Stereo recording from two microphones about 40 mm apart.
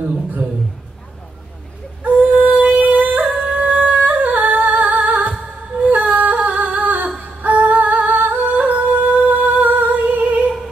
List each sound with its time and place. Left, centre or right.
2.0 s music: right
3.4 s humming: right
4.7 s music: right
5.9 s a sound: right
10.0 s music: right